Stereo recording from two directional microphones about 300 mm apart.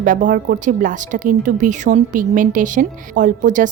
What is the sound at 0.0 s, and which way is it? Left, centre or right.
A woman's voice, right.